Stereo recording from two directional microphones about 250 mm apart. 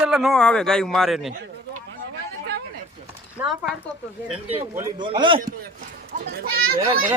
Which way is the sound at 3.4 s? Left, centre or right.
Centre.